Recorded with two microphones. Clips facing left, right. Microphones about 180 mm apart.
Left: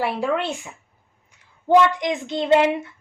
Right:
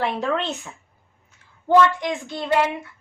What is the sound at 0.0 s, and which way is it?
A child's voice, 10° left (ahead or behind).